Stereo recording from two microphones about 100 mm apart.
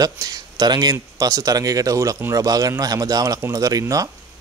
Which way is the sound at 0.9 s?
30° right (ahead or behind).